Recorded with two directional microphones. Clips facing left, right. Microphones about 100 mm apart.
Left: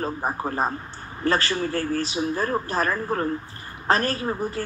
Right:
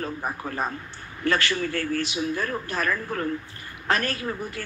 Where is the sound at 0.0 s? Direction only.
35° left (ahead or behind).